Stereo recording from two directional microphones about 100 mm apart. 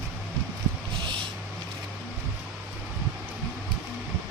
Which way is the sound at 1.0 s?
55° right (ahead or behind).